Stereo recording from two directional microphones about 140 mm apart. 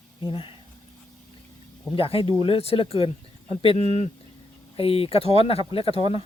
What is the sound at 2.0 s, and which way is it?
Speech, 40° left (ahead or behind).